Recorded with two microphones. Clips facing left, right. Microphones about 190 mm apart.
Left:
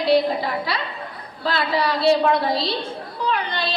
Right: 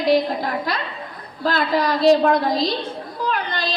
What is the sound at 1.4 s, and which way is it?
A woman's voice, 45° right (ahead or behind).